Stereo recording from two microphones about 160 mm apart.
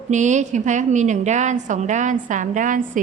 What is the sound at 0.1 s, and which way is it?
A woman's voice, 50° right (ahead or behind).